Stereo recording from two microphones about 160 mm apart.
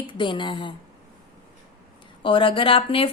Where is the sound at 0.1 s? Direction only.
30° left (ahead or behind).